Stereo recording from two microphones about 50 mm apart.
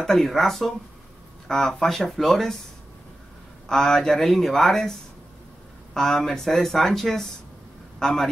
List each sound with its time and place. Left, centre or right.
0.0 s speech: centre
3.6 s speech: centre
5.9 s speech: centre